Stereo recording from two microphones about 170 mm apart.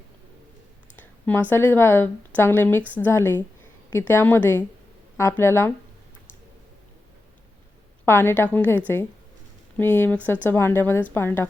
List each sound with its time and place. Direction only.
0.9 s speech: 10° left (ahead or behind)
8.0 s a woman's voice: 15° left (ahead or behind)